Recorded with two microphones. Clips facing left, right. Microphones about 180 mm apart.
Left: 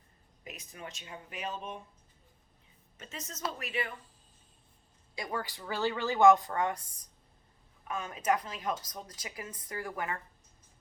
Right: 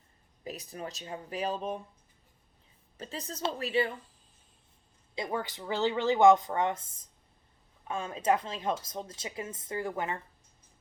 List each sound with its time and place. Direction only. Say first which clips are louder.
0.4 s speech: right 6 dB; 35° right (ahead or behind)
3.0 s speech: right 4 dB; 35° right (ahead or behind)
5.1 s a woman's voice: right 3 dB; 20° right (ahead or behind)